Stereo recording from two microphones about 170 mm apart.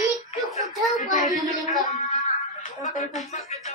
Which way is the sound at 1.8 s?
55° left (ahead or behind).